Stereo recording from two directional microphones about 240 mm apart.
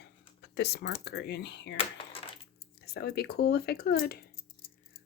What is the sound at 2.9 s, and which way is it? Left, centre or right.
Speech, left.